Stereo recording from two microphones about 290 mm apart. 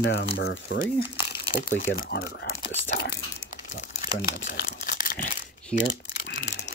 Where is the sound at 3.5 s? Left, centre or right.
Left.